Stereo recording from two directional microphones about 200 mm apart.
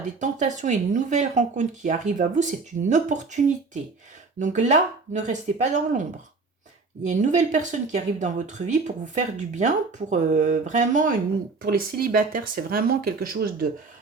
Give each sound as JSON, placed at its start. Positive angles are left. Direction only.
{"t": 0.0, "sound": "speech", "side_deg": -35}